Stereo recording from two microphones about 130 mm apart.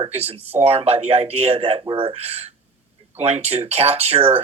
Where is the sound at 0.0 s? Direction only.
50° right (ahead or behind).